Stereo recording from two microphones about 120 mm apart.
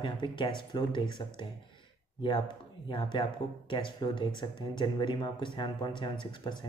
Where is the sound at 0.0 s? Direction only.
40° left (ahead or behind).